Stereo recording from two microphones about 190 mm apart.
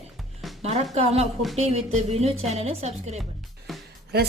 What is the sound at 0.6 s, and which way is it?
Speech, 35° right (ahead or behind).